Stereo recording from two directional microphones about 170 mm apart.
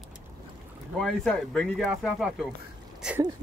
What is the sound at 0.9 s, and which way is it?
Speech, 5° left (ahead or behind).